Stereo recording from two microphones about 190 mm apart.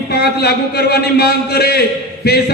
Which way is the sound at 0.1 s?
55° left (ahead or behind).